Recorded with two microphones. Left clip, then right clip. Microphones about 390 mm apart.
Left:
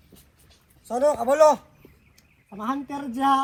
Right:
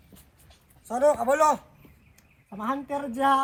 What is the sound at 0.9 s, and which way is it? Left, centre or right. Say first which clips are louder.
Speech: left 1 dB; centre.